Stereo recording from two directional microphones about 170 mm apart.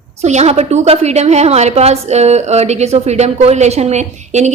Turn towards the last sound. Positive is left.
turn(degrees=-40)  # may be behind; listen again after turning